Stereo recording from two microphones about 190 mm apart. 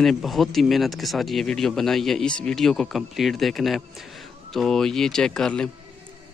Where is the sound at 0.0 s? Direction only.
Centre (ahead or behind).